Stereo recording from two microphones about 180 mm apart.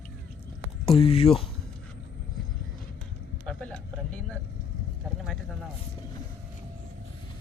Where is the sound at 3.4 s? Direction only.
5° left (ahead or behind).